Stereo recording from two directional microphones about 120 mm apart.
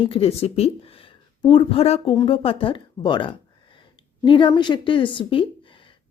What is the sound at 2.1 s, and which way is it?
A woman's voice, 45° left (ahead or behind).